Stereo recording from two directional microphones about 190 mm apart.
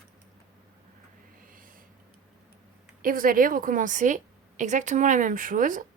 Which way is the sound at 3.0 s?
45° right (ahead or behind).